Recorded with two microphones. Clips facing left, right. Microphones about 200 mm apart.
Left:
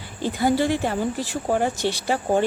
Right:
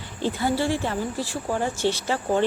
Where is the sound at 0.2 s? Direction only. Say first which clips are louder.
Left 3 dB; 15° left (ahead or behind).